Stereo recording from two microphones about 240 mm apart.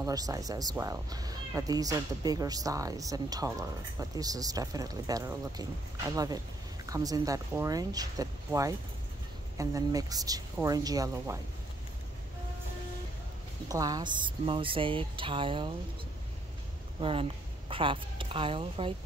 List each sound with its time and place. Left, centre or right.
0.0 s speech: centre
13.7 s speech: centre
17.0 s speech: right